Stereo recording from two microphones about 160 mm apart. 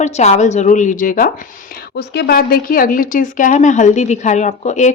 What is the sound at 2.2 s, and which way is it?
A woman's voice, 70° left (ahead or behind).